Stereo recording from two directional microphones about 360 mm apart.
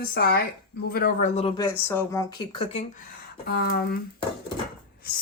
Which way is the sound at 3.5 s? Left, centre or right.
Left.